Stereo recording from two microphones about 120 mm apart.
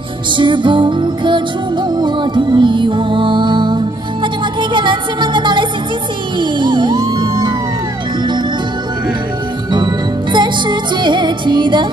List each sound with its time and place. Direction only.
0.4 s music: 40° right (ahead or behind)
10.3 s music: 40° right (ahead or behind)